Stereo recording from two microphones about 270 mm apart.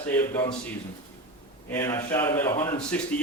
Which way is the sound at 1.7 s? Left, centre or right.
Centre.